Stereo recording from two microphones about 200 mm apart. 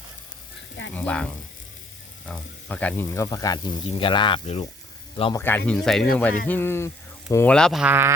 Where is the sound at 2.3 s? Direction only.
5° left (ahead or behind); by 4.7 s 30° left (ahead or behind).